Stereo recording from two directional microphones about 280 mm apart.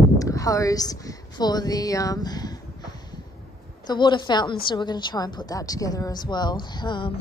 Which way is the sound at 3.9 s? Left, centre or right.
Centre.